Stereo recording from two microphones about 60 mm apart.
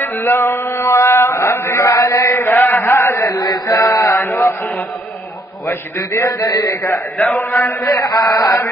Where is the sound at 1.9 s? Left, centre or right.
Left.